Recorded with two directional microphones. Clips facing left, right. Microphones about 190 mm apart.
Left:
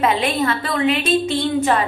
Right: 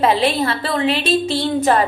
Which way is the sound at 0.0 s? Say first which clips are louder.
Right 2 dB; 30° right (ahead or behind).